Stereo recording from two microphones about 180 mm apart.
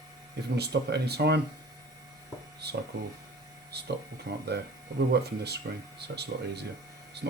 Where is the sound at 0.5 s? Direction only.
65° right (ahead or behind).